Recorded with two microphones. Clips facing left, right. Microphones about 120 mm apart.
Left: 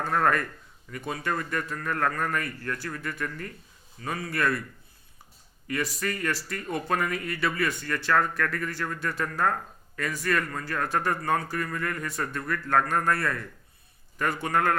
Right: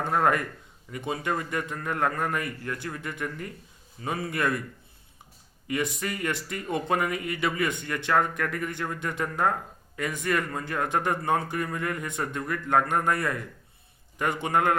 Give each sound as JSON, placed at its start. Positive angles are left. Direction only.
{"t": 0.0, "sound": "speech", "side_deg": -15}
{"t": 5.6, "sound": "speech", "side_deg": -20}